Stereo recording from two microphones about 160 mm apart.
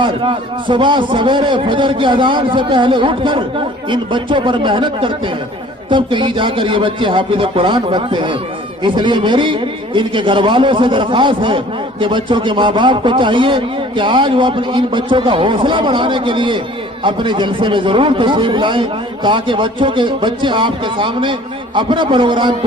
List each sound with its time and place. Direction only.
0.0 s a man's voice: 30° right (ahead or behind)